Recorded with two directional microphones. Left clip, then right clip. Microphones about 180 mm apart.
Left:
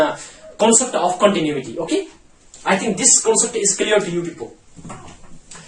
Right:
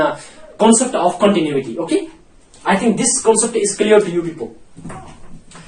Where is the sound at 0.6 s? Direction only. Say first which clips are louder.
Right 2 dB; 25° left (ahead or behind).